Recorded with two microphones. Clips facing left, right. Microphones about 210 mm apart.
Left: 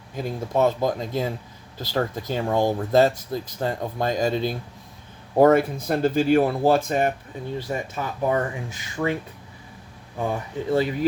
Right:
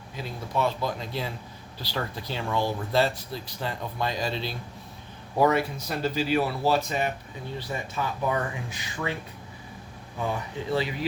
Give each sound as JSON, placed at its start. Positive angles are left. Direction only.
{"t": 0.2, "sound": "speech", "side_deg": 45}
{"t": 10.7, "sound": "speech", "side_deg": 50}